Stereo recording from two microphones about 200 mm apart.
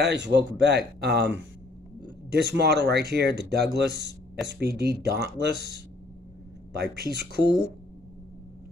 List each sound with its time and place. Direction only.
0.0 s speech: 60° right (ahead or behind)
2.3 s speech: 55° right (ahead or behind)
6.7 s speech: 55° right (ahead or behind)